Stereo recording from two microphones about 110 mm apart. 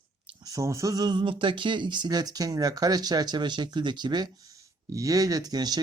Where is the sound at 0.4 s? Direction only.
30° right (ahead or behind).